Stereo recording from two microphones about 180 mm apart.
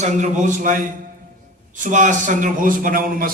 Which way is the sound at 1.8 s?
45° right (ahead or behind).